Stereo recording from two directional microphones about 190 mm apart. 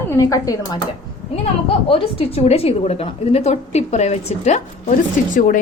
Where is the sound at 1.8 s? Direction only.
30° left (ahead or behind).